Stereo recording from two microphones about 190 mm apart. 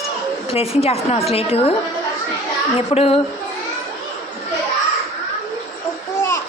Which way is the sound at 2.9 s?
30° left (ahead or behind).